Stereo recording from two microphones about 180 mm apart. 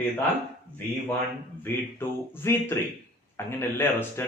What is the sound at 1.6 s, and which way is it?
A man's voice, 10° left (ahead or behind).